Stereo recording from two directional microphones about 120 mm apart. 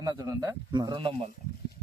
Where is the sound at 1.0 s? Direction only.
50° right (ahead or behind).